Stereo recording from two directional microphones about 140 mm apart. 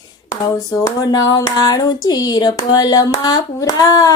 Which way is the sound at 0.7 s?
25° left (ahead or behind).